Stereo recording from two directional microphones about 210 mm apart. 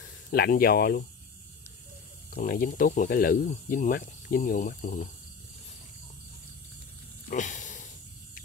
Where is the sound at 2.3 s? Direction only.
45° left (ahead or behind).